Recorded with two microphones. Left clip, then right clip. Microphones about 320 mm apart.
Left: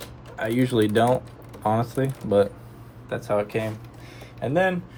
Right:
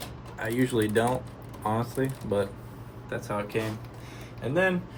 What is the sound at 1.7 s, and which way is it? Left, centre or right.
Speech, left.